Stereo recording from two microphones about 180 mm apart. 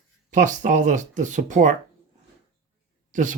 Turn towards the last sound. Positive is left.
turn(degrees=-45)  # may be behind; listen again after turning